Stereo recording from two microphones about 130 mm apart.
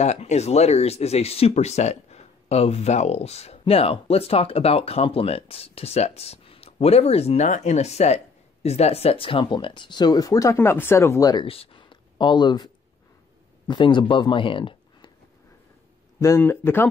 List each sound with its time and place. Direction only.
0.0 s speech: 60° left (ahead or behind); by 11.4 s 30° left (ahead or behind)
11.4 s speech: 45° left (ahead or behind)
13.7 s speech: 40° left (ahead or behind)
16.2 s speech: 20° left (ahead or behind)